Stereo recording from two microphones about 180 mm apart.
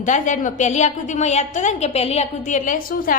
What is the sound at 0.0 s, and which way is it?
A woman's voice, 45° left (ahead or behind).